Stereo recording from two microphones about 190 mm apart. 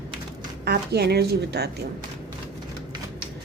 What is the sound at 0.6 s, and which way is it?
A woman's voice, 60° right (ahead or behind).